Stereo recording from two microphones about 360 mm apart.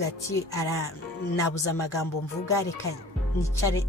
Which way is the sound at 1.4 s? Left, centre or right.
Left.